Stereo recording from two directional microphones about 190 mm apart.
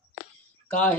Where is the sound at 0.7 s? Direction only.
10° left (ahead or behind).